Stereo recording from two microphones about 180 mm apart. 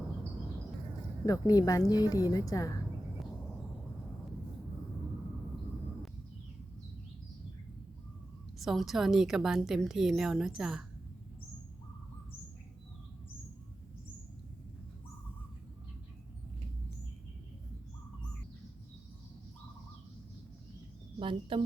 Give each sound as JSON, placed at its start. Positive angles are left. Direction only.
{"t": 1.2, "sound": "speech", "side_deg": 20}
{"t": 8.5, "sound": "a woman's voice", "side_deg": 0}
{"t": 21.2, "sound": "speech", "side_deg": -30}